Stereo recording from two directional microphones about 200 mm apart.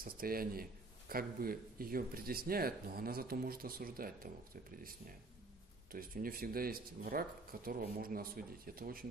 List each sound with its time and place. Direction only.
0.0 s a man's voice: 45° right (ahead or behind)